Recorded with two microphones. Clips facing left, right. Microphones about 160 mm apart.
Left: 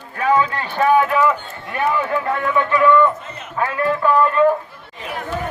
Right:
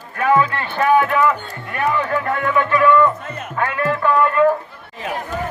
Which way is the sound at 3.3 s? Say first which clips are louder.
Right 4 dB; 50° right (ahead or behind).